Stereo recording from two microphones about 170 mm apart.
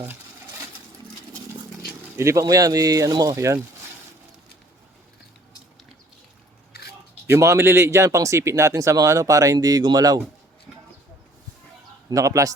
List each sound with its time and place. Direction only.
2.1 s speech: 15° right (ahead or behind)
6.7 s scissors: 65° left (ahead or behind)
7.3 s speech: 15° right (ahead or behind)
12.0 s speech: 20° right (ahead or behind)